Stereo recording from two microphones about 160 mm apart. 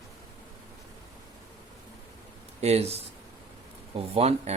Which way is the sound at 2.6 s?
40° right (ahead or behind).